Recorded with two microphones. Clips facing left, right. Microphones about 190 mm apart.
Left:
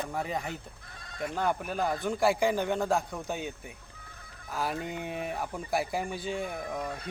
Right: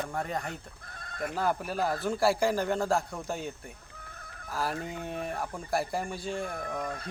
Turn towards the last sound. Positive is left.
turn(degrees=5)  # may be behind; listen again after turning